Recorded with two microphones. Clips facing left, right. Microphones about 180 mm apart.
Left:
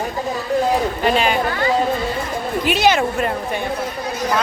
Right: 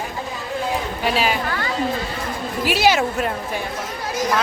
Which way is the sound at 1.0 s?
5° right (ahead or behind).